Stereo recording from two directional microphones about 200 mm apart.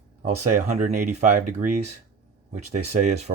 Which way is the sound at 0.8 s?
40° right (ahead or behind).